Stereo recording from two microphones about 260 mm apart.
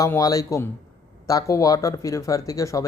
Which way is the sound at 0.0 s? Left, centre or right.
Centre.